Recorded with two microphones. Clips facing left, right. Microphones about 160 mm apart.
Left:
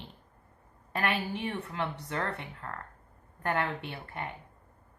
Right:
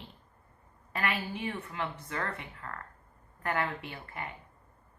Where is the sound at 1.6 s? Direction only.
30° left (ahead or behind).